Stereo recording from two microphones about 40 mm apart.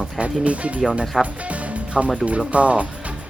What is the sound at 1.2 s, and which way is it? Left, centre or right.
Music, right.